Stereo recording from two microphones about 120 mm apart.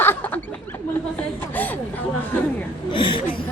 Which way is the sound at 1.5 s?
15° left (ahead or behind).